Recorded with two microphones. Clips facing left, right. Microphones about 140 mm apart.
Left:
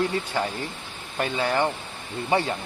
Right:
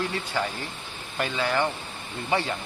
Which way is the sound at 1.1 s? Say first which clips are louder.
Left 2 dB; 30° left (ahead or behind).